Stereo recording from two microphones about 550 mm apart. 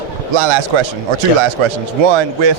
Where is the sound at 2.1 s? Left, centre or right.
Right.